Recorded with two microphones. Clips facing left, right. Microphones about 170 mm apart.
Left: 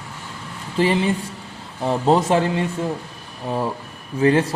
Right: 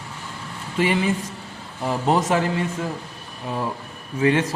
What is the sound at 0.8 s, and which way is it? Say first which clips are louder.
A man's voice: left 2 dB; 30° left (ahead or behind).